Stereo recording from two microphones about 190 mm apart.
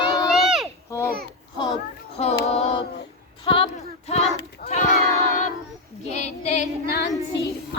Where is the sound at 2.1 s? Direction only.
35° left (ahead or behind).